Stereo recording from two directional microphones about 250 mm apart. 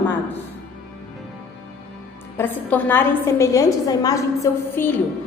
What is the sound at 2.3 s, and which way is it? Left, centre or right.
A woman's voice, centre.